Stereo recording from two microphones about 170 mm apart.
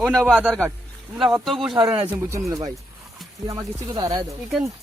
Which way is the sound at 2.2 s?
15° right (ahead or behind).